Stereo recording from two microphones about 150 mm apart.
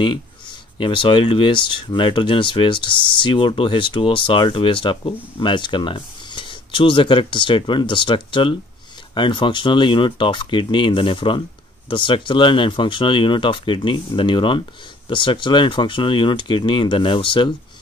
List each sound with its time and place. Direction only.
0.7 s speech: 35° left (ahead or behind)